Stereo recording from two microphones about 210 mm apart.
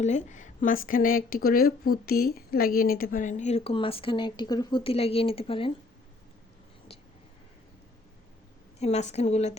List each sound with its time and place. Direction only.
0.0 s a woman's voice: 35° left (ahead or behind)
8.8 s speech: 30° left (ahead or behind)